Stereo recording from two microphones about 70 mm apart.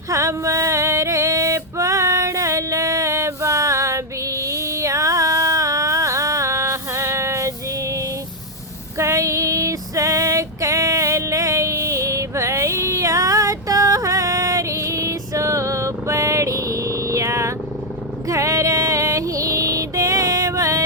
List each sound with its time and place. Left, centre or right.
0.1 s a sound: right
9.0 s female singing: right
18.3 s music: right